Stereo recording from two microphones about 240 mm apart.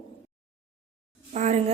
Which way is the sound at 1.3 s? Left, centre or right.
Right.